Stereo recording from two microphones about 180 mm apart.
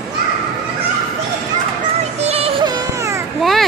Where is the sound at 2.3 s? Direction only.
35° right (ahead or behind); by 3.2 s 15° right (ahead or behind).